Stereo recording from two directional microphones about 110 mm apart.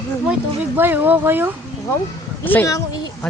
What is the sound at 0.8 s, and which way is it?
Speech, 15° right (ahead or behind).